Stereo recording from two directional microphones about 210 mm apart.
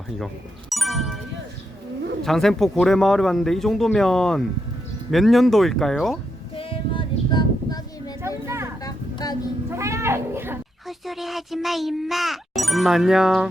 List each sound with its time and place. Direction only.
0.7 s music: centre (ahead or behind)
2.2 s speech: centre (ahead or behind)
6.6 s child singing: 25° left (ahead or behind)
8.4 s a sound: 10° right (ahead or behind)
8.8 s a sound: 20° left (ahead or behind)
9.7 s speech: 15° right (ahead or behind)